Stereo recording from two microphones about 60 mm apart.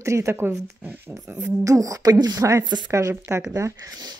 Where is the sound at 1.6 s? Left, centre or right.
Right.